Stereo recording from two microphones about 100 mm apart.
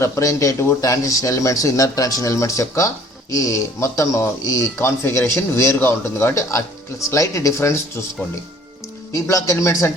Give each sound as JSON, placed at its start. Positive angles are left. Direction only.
{"t": 0.0, "sound": "speech", "side_deg": 30}
{"t": 9.1, "sound": "speech", "side_deg": 35}